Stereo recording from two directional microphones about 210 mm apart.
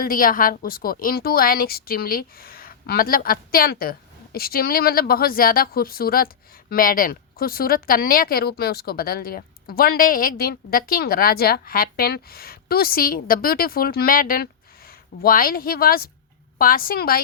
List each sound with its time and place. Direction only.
0.0 s a woman's voice: 40° left (ahead or behind)